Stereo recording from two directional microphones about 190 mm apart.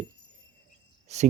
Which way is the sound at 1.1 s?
35° right (ahead or behind).